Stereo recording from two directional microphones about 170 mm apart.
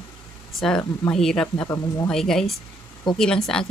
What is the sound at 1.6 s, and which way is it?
Speech, 15° left (ahead or behind).